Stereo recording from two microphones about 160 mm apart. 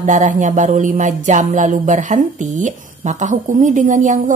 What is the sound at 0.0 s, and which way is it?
Speech, 50° right (ahead or behind).